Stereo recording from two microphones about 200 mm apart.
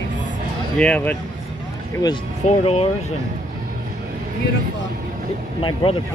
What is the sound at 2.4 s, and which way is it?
Speech, 30° left (ahead or behind).